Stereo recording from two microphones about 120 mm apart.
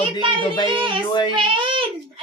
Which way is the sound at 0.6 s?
45° right (ahead or behind).